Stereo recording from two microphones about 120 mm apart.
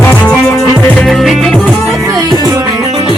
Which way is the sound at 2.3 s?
35° right (ahead or behind).